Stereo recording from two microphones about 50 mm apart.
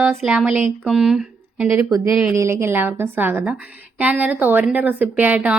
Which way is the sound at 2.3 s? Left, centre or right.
Right.